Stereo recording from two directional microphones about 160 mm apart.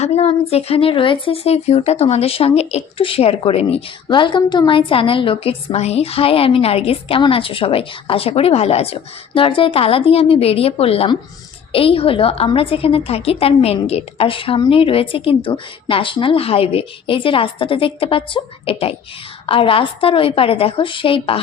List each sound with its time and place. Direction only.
0.0 s speech: 40° left (ahead or behind)